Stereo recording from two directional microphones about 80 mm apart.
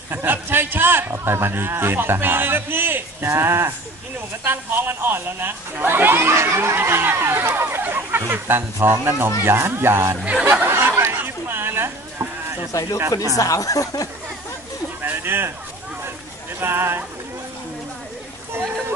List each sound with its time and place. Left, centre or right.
0.1 s speech: right
10.7 s chatter: right
12.7 s speech: left
15.0 s a sound: right
16.5 s speech: right
18.5 s a sound: right